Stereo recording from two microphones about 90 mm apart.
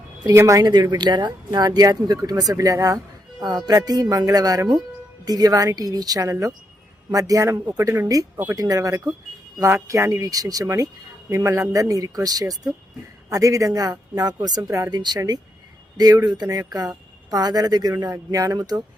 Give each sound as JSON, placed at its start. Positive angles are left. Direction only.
{"t": 0.3, "sound": "speech", "side_deg": -35}
{"t": 0.6, "sound": "speech", "side_deg": -50}
{"t": 14.9, "sound": "speech", "side_deg": -50}